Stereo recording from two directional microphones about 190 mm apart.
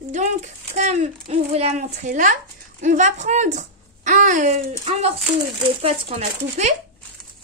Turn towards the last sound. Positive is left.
turn(degrees=-35)  # may be behind; listen again after turning